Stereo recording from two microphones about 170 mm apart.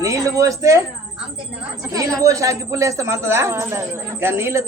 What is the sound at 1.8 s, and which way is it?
A woman's voice, 20° right (ahead or behind).